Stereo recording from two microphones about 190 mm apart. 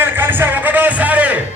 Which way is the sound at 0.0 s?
10° right (ahead or behind).